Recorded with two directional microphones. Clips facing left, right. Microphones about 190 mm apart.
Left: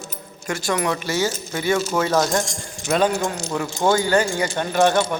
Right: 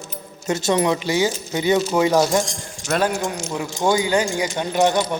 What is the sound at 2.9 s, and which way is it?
Speech, 5° left (ahead or behind).